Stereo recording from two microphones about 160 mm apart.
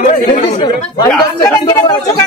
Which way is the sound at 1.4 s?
20° left (ahead or behind).